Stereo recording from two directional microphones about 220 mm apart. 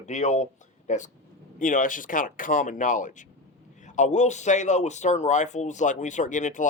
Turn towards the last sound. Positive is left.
turn(degrees=35)  # may be behind; listen again after turning